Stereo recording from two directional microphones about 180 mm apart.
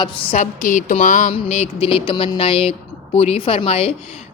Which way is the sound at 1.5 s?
35° left (ahead or behind).